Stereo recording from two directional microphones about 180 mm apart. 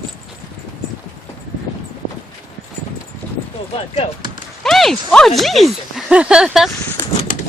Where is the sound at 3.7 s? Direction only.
30° left (ahead or behind).